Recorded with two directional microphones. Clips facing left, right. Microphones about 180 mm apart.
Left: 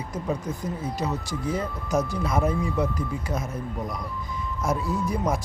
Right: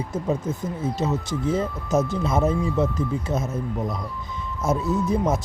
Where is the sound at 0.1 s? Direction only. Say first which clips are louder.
Right 2 dB; 25° right (ahead or behind).